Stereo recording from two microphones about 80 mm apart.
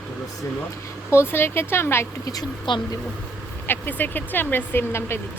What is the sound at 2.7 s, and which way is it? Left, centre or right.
Speech, left.